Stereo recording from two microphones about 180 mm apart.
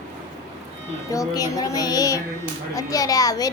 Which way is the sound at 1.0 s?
20° left (ahead or behind).